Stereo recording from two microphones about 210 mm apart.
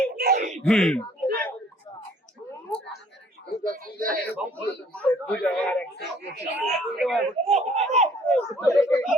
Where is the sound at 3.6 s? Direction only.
40° right (ahead or behind).